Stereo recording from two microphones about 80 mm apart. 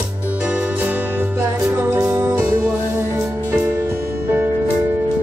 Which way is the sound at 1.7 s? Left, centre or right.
Centre.